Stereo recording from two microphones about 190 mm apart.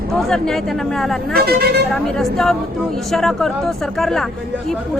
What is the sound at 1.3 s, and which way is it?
Speech, 55° right (ahead or behind).